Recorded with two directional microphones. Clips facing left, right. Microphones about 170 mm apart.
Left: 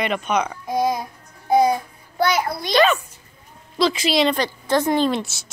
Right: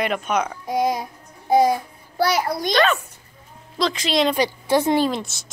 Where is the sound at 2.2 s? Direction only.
40° right (ahead or behind).